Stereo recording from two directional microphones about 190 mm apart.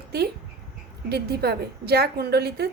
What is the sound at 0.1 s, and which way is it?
A woman's voice, 55° right (ahead or behind).